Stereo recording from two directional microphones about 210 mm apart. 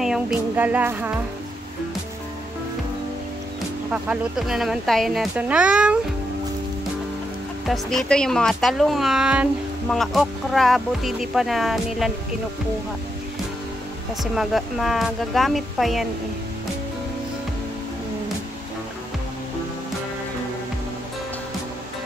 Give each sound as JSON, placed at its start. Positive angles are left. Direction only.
{"t": 0.0, "sound": "music", "side_deg": -5}
{"t": 3.9, "sound": "speech", "side_deg": -5}
{"t": 7.6, "sound": "speech", "side_deg": 0}
{"t": 14.2, "sound": "speech", "side_deg": 0}